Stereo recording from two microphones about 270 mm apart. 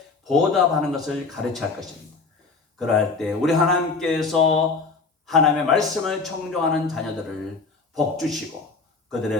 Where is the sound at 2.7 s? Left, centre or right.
Centre.